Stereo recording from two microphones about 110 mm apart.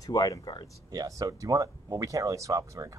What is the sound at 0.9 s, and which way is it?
Speech, 35° right (ahead or behind).